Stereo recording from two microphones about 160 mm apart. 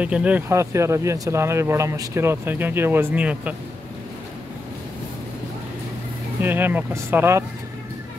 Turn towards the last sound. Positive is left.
turn(degrees=-15)  # may be behind; listen again after turning